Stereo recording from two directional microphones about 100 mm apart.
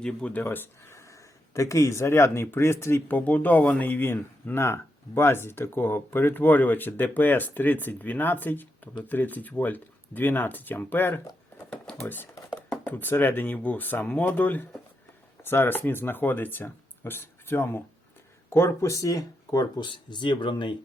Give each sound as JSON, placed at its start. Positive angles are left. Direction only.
{"t": 0.0, "sound": "speech", "side_deg": 10}
{"t": 0.4, "sound": "speech", "side_deg": 20}